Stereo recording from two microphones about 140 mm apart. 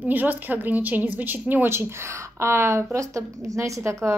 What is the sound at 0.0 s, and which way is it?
A woman's voice, 10° right (ahead or behind).